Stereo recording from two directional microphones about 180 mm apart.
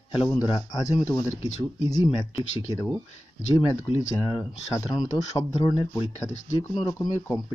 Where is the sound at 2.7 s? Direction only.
20° left (ahead or behind).